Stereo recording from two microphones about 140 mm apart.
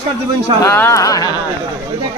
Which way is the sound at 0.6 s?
20° left (ahead or behind).